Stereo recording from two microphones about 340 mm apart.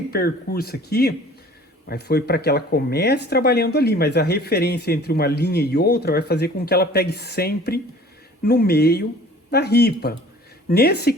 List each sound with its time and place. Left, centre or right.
0.1 s speech: left